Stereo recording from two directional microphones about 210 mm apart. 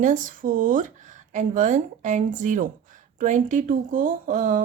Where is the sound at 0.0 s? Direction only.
40° right (ahead or behind).